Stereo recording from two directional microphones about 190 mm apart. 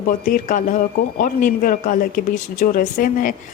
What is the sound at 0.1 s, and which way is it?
Speech, 45° left (ahead or behind).